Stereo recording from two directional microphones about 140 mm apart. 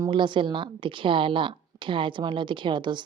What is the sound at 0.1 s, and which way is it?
A woman's voice, 35° right (ahead or behind).